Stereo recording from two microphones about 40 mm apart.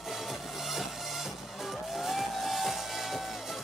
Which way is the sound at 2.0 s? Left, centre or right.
Centre.